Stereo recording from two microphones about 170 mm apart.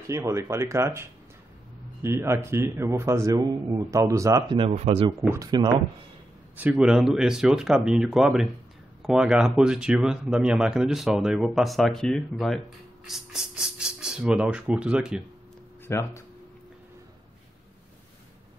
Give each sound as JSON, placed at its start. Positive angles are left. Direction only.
{"t": 0.1, "sound": "a man's voice", "side_deg": -15}
{"t": 5.3, "sound": "speech", "side_deg": -25}
{"t": 6.5, "sound": "speech", "side_deg": -10}
{"t": 15.9, "sound": "speech", "side_deg": 15}